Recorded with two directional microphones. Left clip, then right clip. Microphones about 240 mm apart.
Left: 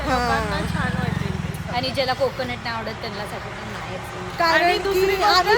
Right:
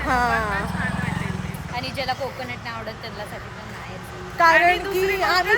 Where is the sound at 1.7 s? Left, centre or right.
Left.